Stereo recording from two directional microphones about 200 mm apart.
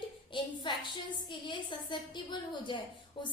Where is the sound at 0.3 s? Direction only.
25° left (ahead or behind).